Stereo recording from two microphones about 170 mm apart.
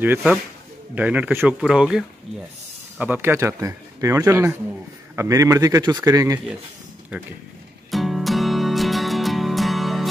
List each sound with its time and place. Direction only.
0.0 s a man's voice: 10° right (ahead or behind)
7.9 s music: centre (ahead or behind)